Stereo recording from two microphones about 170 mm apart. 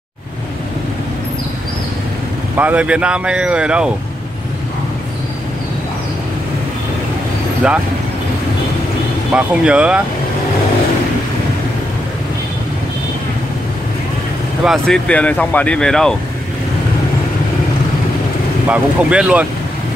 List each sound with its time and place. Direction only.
2.5 s speech: 10° right (ahead or behind)
7.6 s speech: 5° right (ahead or behind)
9.3 s speech: 5° right (ahead or behind)
14.6 s speech: centre (ahead or behind)
18.7 s speech: 5° right (ahead or behind)